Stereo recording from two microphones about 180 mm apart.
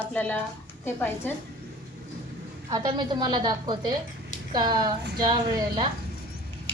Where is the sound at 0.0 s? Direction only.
10° left (ahead or behind).